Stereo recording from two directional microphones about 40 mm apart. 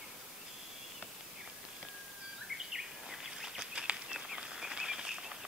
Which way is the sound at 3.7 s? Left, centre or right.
Centre.